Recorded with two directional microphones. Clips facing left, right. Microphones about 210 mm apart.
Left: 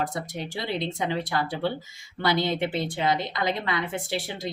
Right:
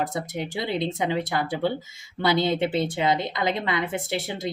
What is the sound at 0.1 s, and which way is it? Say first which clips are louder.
A woman's voice: right 3 dB; 20° right (ahead or behind).